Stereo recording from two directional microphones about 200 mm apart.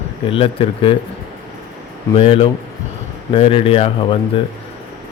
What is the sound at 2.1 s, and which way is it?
Speech, 30° left (ahead or behind).